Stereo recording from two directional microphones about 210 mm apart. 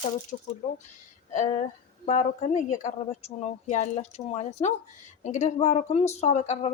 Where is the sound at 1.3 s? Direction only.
35° left (ahead or behind).